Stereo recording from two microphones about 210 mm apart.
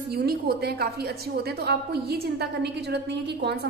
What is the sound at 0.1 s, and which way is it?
A woman's voice, 50° right (ahead or behind).